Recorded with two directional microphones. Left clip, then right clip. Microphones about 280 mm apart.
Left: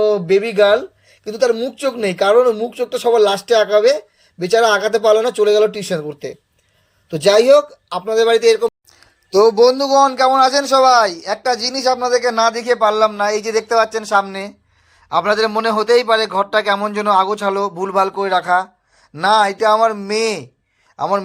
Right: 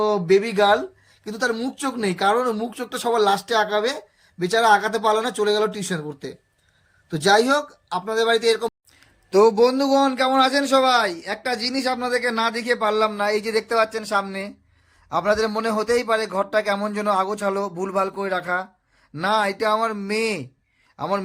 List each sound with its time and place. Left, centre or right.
0.0 s speech: centre
7.1 s speech: centre
10.6 s speech: right
10.8 s a man's voice: centre